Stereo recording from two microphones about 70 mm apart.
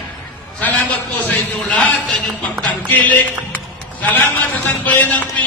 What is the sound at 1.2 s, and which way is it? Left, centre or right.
A man's voice, left.